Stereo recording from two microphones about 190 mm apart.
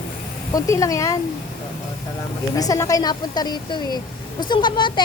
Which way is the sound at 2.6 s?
20° left (ahead or behind).